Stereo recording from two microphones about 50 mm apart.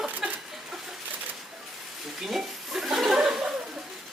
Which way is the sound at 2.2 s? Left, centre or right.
Centre.